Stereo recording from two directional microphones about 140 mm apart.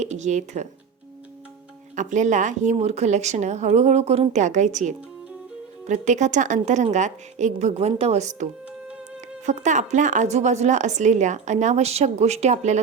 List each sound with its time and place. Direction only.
0.0 s speech: 55° right (ahead or behind)
2.0 s speech: 60° right (ahead or behind)
9.5 s speech: 60° right (ahead or behind)